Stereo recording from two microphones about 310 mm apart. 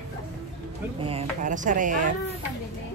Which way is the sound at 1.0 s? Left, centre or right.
Right.